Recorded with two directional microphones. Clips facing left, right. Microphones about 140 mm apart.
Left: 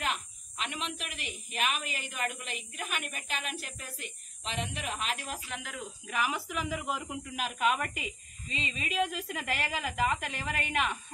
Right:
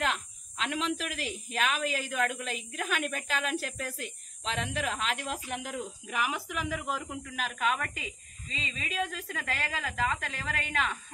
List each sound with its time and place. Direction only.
0.0 s speech: 90° right
6.0 s speech: 15° right (ahead or behind)
6.7 s speech: 10° left (ahead or behind)